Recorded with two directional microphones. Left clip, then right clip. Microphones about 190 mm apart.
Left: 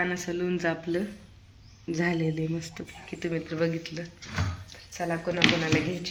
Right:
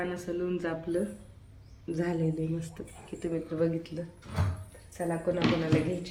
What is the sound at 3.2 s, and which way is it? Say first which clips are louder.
Speech: left 1 dB; 5° left (ahead or behind).